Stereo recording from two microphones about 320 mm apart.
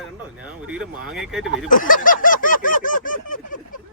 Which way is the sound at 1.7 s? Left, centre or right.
Left.